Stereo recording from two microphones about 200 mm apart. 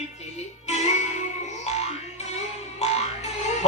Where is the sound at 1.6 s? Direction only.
35° left (ahead or behind).